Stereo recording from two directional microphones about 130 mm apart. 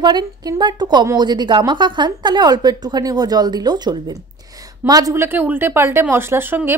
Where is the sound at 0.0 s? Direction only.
35° right (ahead or behind).